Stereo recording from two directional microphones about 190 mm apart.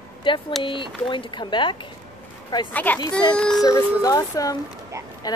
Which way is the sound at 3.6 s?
20° left (ahead or behind).